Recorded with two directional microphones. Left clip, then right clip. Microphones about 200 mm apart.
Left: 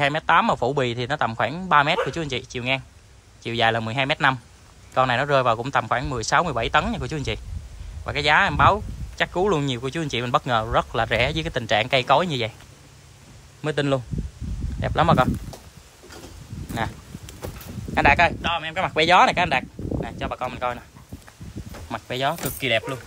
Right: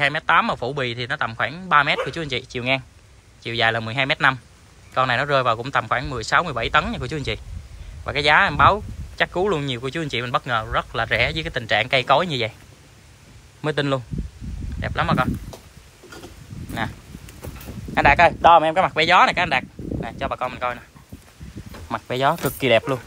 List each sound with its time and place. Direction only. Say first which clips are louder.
0.0 s speech: right 1 dB; 15° left (ahead or behind)
13.6 s speech: right 1 dB; 10° left (ahead or behind)
17.9 s speech: right 3 dB; 10° left (ahead or behind)
18.4 s speech: right 11 dB; 5° right (ahead or behind)
18.9 s speech: left 1 dB; 15° left (ahead or behind)
21.8 s speech: right 4 dB; 5° left (ahead or behind)